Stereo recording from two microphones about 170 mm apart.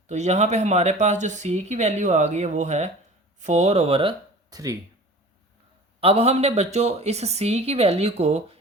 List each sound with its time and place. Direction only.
0.1 s speech: 45° right (ahead or behind); by 4.8 s 20° right (ahead or behind)
6.0 s speech: 35° right (ahead or behind)